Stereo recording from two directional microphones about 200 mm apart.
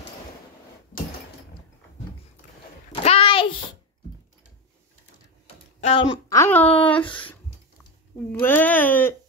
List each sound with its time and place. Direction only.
3.0 s a sound: 30° left (ahead or behind)
5.9 s speech: 15° left (ahead or behind)
7.0 s speech: 25° left (ahead or behind)
8.3 s speech: 10° left (ahead or behind)